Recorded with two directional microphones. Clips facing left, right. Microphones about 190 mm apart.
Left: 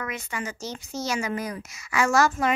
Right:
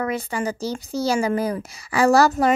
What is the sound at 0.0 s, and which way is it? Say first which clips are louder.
A child's voice: right 8 dB; 35° right (ahead or behind).